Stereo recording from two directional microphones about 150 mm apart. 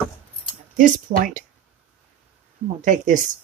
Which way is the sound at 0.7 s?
65° right (ahead or behind).